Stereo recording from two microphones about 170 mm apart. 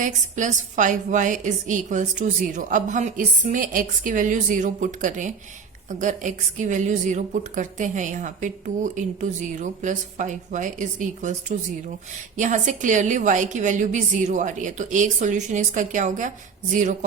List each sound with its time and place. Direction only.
0.0 s a woman's voice: 50° right (ahead or behind)